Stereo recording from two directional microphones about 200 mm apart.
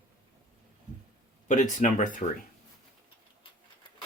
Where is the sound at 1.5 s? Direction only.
40° left (ahead or behind).